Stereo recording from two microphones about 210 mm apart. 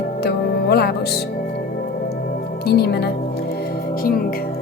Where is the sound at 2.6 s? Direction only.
50° left (ahead or behind).